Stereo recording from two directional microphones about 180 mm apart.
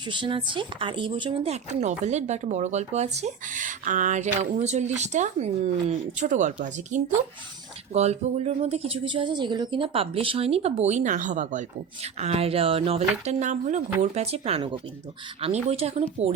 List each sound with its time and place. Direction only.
0.1 s speech: 25° right (ahead or behind)